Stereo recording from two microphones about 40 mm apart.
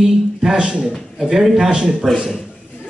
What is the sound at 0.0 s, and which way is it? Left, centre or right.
Speech, centre.